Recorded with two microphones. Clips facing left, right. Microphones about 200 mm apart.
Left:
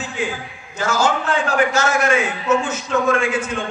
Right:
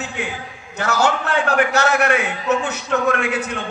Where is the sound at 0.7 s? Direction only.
65° right (ahead or behind).